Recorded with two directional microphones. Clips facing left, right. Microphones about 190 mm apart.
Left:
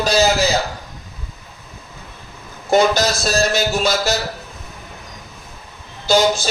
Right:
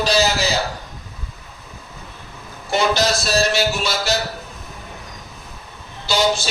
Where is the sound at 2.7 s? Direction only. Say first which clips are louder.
Left 4 dB; 45° left (ahead or behind).